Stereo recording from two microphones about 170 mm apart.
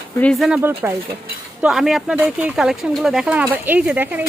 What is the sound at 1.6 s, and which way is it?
Speech, centre (ahead or behind).